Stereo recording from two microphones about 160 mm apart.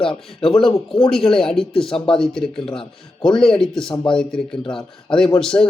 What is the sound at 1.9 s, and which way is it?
Speech, 35° left (ahead or behind).